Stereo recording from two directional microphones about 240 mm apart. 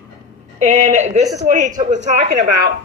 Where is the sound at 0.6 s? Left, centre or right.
Right.